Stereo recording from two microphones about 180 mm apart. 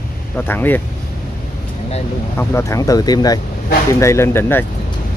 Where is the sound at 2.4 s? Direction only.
15° left (ahead or behind).